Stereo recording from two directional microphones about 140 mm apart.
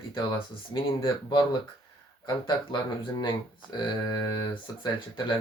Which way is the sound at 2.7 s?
35° left (ahead or behind).